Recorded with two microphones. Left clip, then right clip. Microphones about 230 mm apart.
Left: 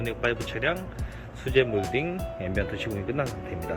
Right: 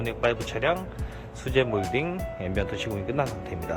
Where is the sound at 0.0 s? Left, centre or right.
Centre.